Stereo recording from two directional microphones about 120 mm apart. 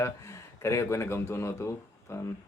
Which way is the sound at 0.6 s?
25° left (ahead or behind).